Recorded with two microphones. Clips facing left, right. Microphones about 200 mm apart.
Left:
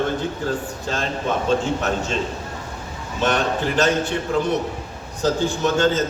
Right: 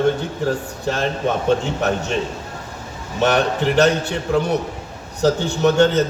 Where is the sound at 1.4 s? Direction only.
65° right (ahead or behind).